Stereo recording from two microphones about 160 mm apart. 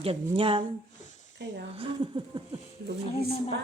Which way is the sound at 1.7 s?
35° right (ahead or behind).